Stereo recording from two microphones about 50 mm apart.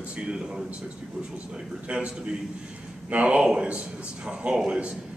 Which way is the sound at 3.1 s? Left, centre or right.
Right.